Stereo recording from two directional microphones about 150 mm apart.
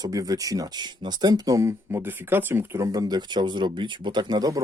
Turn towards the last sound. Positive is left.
turn(degrees=-25)  # may be behind; listen again after turning